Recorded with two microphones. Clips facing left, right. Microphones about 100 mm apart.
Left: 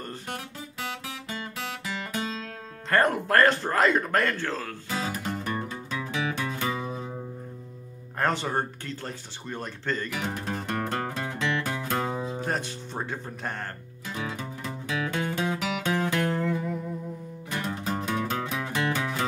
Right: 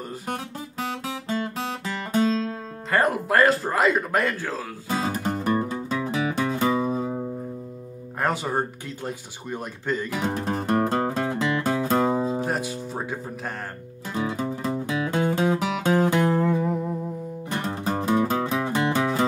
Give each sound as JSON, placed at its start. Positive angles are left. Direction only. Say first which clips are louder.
{"t": 1.0, "sound": "music", "louder": "right 8 dB", "side_deg": -30}
{"t": 2.9, "sound": "speech", "louder": "right 1 dB", "side_deg": -5}
{"t": 4.8, "sound": "music", "louder": "right 7 dB", "side_deg": -35}
{"t": 8.2, "sound": "speech", "louder": "right 2 dB", "side_deg": -5}
{"t": 10.2, "sound": "music", "louder": "right 6 dB", "side_deg": -25}
{"t": 12.4, "sound": "speech", "louder": "right 4 dB", "side_deg": -5}
{"t": 14.1, "sound": "music", "louder": "right 8 dB", "side_deg": -30}
{"t": 18.6, "sound": "music", "louder": "right 5 dB", "side_deg": -25}